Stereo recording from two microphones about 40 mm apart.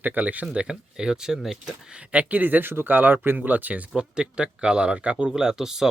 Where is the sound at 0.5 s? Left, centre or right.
Right.